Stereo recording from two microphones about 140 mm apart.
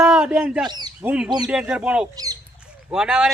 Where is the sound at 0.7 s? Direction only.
30° right (ahead or behind).